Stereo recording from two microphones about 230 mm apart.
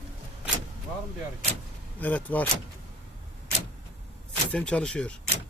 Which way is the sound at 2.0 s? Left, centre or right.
Centre.